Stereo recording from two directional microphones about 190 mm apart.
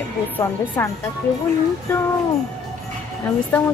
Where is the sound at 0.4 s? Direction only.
15° left (ahead or behind).